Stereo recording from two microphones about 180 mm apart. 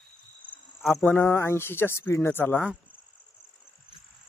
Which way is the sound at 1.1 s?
15° left (ahead or behind).